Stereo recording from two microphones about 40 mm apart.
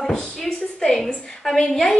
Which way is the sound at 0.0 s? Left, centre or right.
Centre.